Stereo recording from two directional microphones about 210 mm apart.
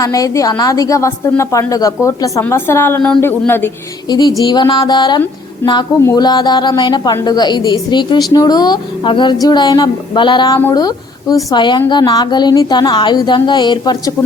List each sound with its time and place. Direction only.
0.0 s a woman's voice: 15° left (ahead or behind)